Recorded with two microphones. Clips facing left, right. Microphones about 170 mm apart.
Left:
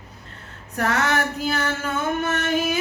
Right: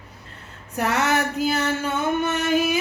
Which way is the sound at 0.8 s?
10° right (ahead or behind).